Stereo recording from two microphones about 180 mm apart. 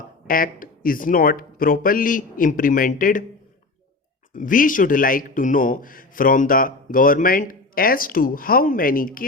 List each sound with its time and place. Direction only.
0.3 s a man's voice: 50° left (ahead or behind)
4.4 s a man's voice: 50° left (ahead or behind)